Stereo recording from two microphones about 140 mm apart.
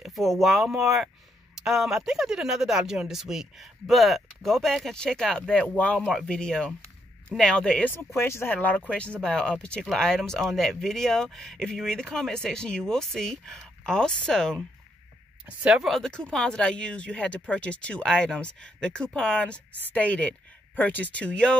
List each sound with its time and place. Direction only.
0.0 s speech: centre (ahead or behind)
8.2 s speech: 20° left (ahead or behind)
15.4 s speech: 10° right (ahead or behind)